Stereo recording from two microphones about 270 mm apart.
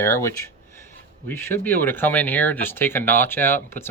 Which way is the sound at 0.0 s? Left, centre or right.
Centre.